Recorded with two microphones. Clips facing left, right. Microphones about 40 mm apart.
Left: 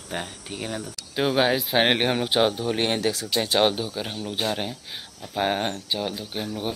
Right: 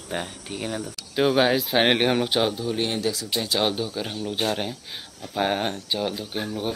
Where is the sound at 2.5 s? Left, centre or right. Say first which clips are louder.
Left 2 dB; left.